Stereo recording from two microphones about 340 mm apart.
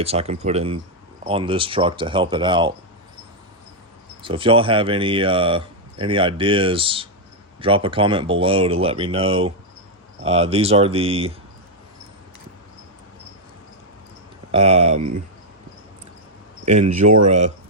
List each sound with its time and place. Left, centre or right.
0.0 s speech: centre
4.2 s speech: centre
14.5 s speech: centre
17.2 s speech: centre